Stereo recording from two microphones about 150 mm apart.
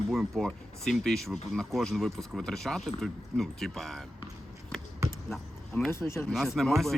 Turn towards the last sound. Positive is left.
turn(degrees=0)  # may be behind; listen again after turning